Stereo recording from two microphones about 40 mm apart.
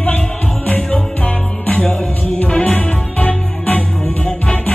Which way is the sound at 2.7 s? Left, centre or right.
Left.